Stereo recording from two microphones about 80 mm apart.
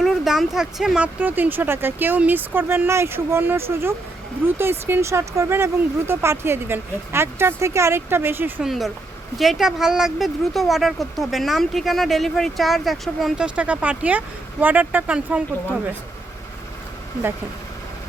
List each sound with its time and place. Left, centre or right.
0.0 s speech: centre
1.0 s speech: right
8.6 s speech: centre
13.4 s speech: centre